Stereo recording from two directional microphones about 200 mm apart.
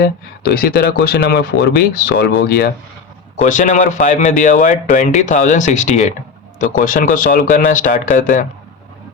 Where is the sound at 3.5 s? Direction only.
40° left (ahead or behind).